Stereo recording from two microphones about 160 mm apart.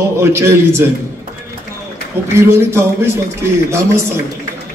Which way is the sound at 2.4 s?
15° right (ahead or behind).